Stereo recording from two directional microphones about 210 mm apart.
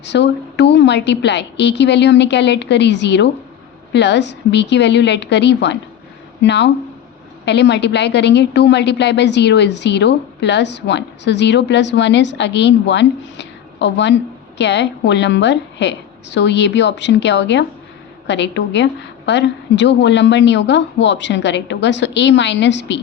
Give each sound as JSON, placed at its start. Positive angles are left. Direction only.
{"t": 0.0, "sound": "a woman's voice", "side_deg": 55}